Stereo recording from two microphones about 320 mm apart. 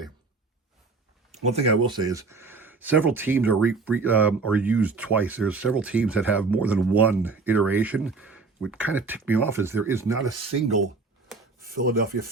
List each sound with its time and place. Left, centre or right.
1.5 s speech: centre
11.6 s speech: right